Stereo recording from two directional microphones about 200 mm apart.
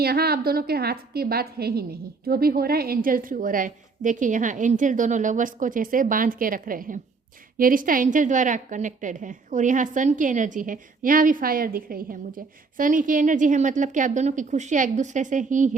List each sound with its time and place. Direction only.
0.0 s a woman's voice: 50° right (ahead or behind)